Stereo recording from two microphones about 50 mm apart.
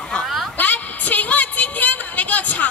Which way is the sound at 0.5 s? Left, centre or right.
Left.